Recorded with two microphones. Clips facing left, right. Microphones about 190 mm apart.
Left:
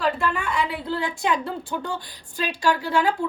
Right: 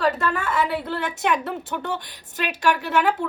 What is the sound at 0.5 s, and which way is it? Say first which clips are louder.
Speech: right 2 dB; 20° right (ahead or behind).